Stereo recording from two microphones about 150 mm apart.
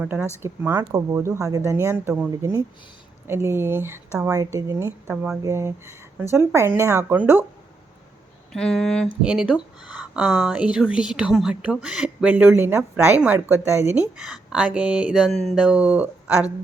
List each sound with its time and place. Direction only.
0.0 s a woman's voice: 10° right (ahead or behind)
8.5 s speech: 5° left (ahead or behind)
9.2 s a woman's voice: 5° right (ahead or behind)